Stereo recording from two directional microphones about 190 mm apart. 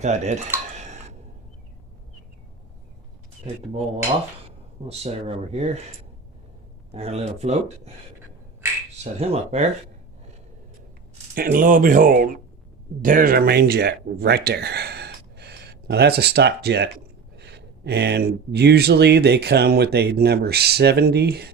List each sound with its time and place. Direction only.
0.0 s speech: 35° right (ahead or behind)
0.8 s tick-tock: 35° right (ahead or behind)
4.9 s speech: 35° right (ahead or behind)
6.9 s speech: 35° right (ahead or behind)
9.2 s speech: 35° right (ahead or behind)
11.3 s speech: 45° right (ahead or behind)